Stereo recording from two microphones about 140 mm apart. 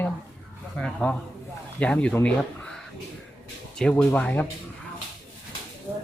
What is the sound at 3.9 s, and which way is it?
Speech, 10° left (ahead or behind).